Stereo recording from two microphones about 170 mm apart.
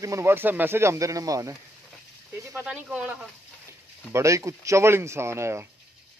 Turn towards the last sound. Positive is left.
turn(degrees=-15)  # may be behind; listen again after turning